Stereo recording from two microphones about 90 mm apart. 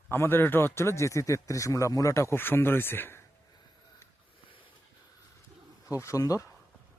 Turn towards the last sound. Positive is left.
turn(degrees=40)  # may be behind; listen again after turning